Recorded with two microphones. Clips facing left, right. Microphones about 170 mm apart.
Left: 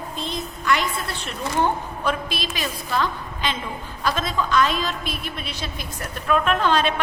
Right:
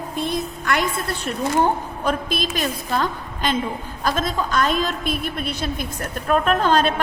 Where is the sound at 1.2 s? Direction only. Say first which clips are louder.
Right 3 dB; 40° right (ahead or behind).